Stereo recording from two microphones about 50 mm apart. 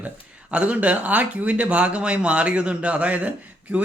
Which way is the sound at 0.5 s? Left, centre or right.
Right.